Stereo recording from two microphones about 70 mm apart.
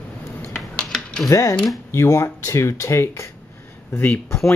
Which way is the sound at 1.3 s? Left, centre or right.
Left.